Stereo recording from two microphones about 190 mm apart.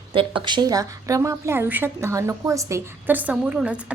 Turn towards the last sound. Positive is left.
turn(degrees=-5)  # may be behind; listen again after turning